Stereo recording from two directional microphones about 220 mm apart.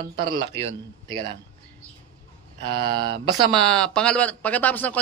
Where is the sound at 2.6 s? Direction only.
25° right (ahead or behind).